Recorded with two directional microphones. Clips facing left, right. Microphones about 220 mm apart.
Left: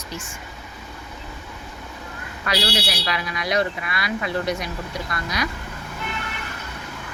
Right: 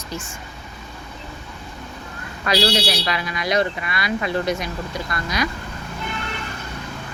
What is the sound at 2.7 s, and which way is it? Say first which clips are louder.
Speech: right 4 dB; 30° right (ahead or behind).